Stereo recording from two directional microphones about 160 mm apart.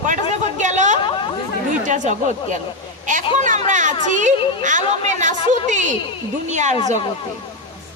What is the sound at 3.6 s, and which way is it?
Speech, 50° right (ahead or behind).